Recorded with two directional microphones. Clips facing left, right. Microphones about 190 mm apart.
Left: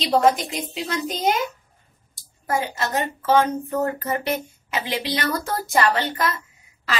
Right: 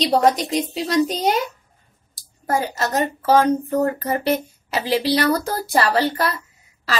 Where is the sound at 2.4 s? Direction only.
40° right (ahead or behind).